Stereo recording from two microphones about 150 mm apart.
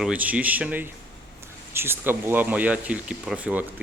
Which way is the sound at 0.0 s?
10° right (ahead or behind).